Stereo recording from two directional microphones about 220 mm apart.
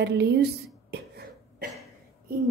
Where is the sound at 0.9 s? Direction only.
45° right (ahead or behind).